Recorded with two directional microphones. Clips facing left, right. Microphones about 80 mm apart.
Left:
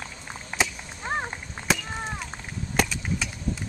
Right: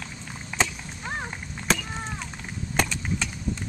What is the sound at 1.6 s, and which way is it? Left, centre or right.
Chop, centre.